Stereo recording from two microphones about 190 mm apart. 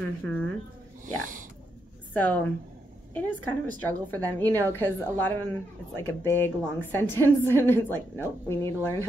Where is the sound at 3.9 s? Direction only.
10° left (ahead or behind).